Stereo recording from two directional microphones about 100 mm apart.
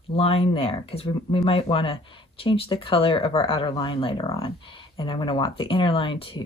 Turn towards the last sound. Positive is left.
turn(degrees=60)  # may be behind; listen again after turning